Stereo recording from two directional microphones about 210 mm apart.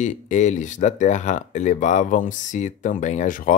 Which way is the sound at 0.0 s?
35° left (ahead or behind).